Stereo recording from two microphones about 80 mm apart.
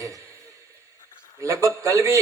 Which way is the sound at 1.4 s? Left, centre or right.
Right.